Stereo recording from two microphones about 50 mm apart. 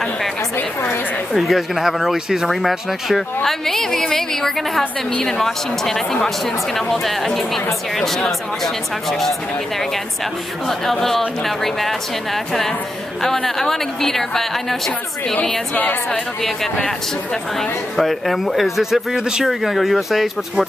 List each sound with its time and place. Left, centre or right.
1.3 s speech: centre
3.4 s a woman's voice: centre
10.7 s speech: centre
13.2 s a woman's voice: centre
15.7 s a woman's voice: left
17.6 s speech: centre